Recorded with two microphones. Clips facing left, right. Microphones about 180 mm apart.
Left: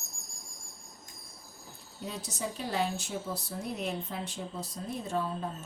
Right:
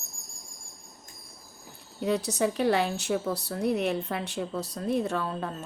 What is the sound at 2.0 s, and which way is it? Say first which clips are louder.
A woman's voice: right 11 dB; 70° right (ahead or behind).